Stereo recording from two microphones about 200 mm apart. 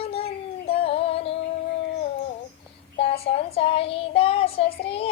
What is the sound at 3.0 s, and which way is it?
Child singing, 30° left (ahead or behind).